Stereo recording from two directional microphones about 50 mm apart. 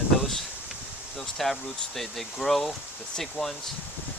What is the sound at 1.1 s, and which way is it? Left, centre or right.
Speech, centre.